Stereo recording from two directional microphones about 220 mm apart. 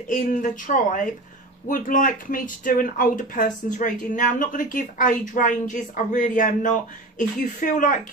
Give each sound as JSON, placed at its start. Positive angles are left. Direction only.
{"t": 0.1, "sound": "speech", "side_deg": 40}